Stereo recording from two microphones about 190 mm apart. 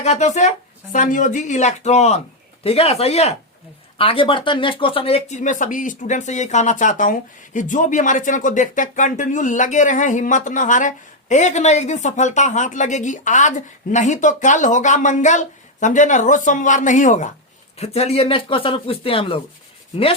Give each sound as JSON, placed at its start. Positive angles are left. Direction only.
{"t": 0.0, "sound": "speech", "side_deg": 35}